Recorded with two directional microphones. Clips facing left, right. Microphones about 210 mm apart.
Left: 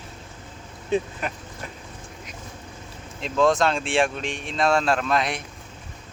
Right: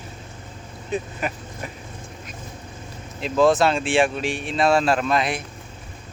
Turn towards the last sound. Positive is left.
turn(degrees=0)  # may be behind; listen again after turning